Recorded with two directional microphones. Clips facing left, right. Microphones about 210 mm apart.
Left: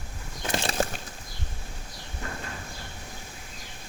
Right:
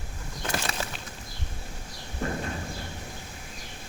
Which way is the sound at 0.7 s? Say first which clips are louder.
Left 7 dB; 45° left (ahead or behind).